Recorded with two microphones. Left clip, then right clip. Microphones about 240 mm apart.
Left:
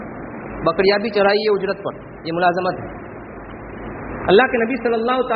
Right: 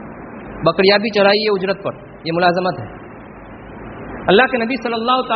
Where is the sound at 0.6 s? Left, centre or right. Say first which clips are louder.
Right 3 dB; right.